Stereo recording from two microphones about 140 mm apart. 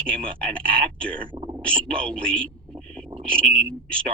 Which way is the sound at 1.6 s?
10° left (ahead or behind).